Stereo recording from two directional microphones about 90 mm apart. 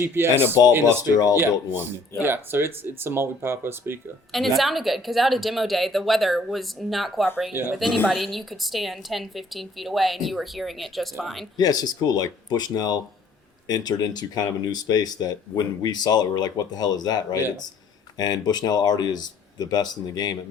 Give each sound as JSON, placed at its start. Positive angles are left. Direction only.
{"t": 0.0, "sound": "speech", "side_deg": -25}
{"t": 1.0, "sound": "speech", "side_deg": 45}
{"t": 1.4, "sound": "speech", "side_deg": -25}
{"t": 4.3, "sound": "a woman's voice", "side_deg": 0}
{"t": 7.5, "sound": "speech", "side_deg": -20}
{"t": 8.0, "sound": "a woman's voice", "side_deg": -5}
{"t": 11.5, "sound": "speech", "side_deg": 45}